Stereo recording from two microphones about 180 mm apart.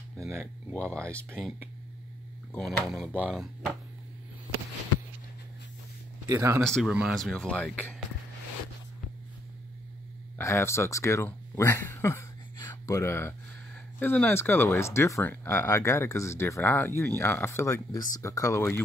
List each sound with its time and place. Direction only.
0.2 s speech: 15° right (ahead or behind)
0.7 s speech: 5° left (ahead or behind)
2.5 s speech: centre (ahead or behind)
6.2 s speech: 15° right (ahead or behind)
6.6 s speech: centre (ahead or behind)
10.3 s speech: 15° left (ahead or behind)